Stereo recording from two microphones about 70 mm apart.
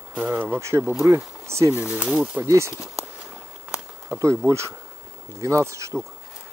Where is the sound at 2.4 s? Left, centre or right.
Right.